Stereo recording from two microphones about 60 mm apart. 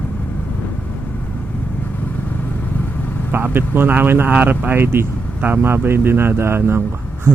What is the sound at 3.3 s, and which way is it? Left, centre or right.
Speech, right.